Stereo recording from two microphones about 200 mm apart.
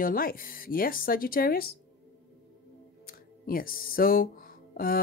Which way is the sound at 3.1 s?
45° left (ahead or behind).